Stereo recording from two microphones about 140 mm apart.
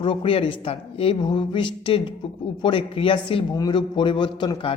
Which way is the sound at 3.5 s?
30° left (ahead or behind).